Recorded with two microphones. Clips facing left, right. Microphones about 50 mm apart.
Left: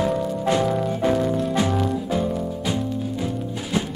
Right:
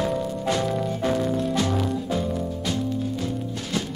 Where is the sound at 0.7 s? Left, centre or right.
Centre.